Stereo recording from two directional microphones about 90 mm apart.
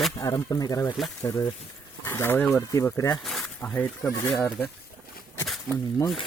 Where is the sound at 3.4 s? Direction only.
20° left (ahead or behind).